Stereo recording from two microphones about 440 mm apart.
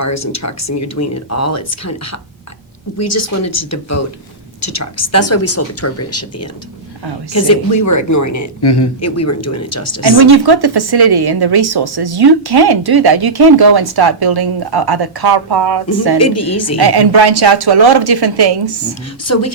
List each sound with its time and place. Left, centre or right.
0.0 s speech: left
8.6 s a man's voice: left
9.0 s speech: left
10.2 s a woman's voice: right
16.1 s speech: left
16.7 s a woman's voice: right
19.2 s speech: left